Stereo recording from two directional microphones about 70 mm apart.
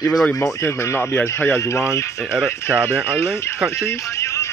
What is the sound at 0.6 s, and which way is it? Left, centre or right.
Speech, left.